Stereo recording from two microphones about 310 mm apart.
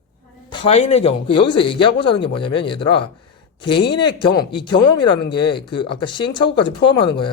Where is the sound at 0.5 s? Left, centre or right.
Centre.